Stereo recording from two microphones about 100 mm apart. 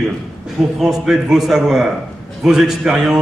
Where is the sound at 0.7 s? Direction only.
Centre (ahead or behind).